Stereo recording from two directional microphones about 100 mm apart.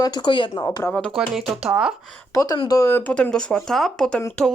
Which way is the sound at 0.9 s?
10° left (ahead or behind).